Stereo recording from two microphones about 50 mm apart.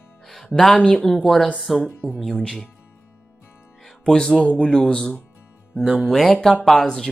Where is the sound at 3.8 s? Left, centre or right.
Centre.